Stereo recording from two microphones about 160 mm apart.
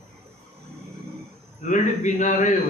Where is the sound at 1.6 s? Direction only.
50° left (ahead or behind).